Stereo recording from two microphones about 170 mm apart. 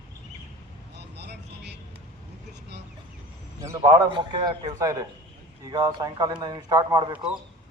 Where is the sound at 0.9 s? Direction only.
75° right (ahead or behind).